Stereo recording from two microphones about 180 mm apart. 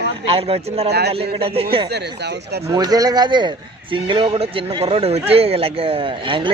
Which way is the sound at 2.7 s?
20° right (ahead or behind).